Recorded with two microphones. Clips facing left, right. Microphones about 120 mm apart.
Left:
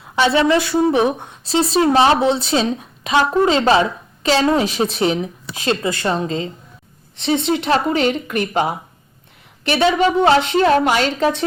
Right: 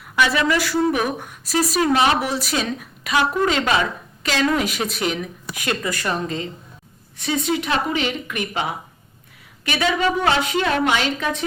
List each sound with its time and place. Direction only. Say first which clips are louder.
0.0 s a woman's voice: left 4 dB; 25° left (ahead or behind)
9.6 s a woman's voice: left 5 dB; 25° left (ahead or behind)